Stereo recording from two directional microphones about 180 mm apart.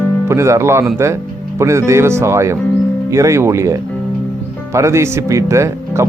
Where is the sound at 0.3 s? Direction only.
15° right (ahead or behind).